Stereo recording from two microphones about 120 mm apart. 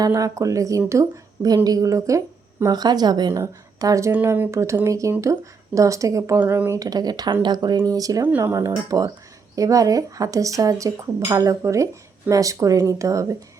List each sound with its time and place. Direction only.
0.0 s speech: 25° right (ahead or behind)
6.4 s a woman's voice: 15° right (ahead or behind)
6.7 s speech: 30° right (ahead or behind)